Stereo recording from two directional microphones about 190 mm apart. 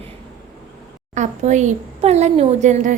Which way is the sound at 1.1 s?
40° right (ahead or behind).